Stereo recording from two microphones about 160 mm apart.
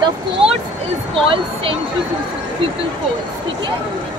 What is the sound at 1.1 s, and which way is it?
Speech, 35° right (ahead or behind).